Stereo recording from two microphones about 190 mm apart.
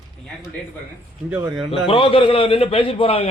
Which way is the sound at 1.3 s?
5° right (ahead or behind).